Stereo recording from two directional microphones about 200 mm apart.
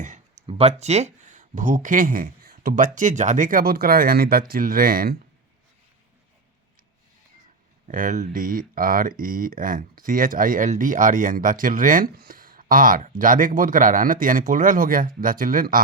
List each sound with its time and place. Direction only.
0.4 s speech: 30° right (ahead or behind); by 5.1 s 45° right (ahead or behind)
7.9 s speech: 40° right (ahead or behind)